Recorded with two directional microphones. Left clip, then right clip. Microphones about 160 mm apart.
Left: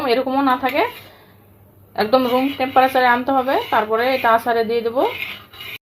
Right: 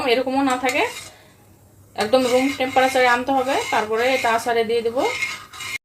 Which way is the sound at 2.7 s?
25° left (ahead or behind).